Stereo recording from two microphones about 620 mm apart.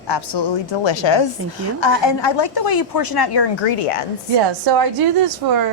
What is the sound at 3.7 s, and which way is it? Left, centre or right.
Speech, left.